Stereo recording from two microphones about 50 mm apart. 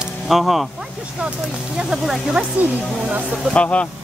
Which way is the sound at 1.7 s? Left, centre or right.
Centre.